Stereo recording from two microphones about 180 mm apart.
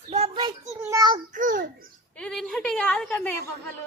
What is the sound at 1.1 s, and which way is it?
Speech, 45° right (ahead or behind).